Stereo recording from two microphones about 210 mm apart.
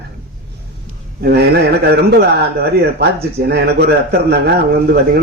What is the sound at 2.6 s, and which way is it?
A man's voice, 50° right (ahead or behind).